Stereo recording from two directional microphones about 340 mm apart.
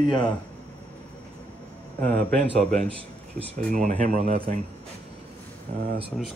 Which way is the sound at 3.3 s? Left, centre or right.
Right.